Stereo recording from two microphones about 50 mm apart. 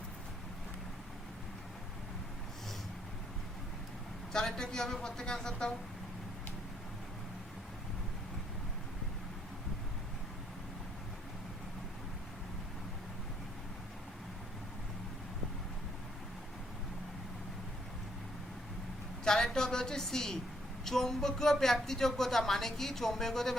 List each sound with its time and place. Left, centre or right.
4.3 s a woman's voice: centre
19.2 s a sound: centre
20.8 s a woman's voice: centre